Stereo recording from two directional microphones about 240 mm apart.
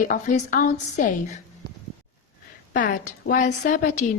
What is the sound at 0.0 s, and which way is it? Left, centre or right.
A woman's voice, left.